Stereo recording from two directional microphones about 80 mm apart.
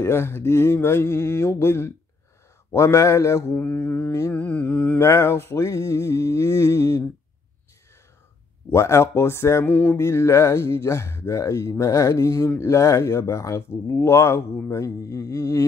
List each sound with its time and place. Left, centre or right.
0.0 s speech: left
3.5 s mantra: left
4.9 s speech: left
8.6 s speech: left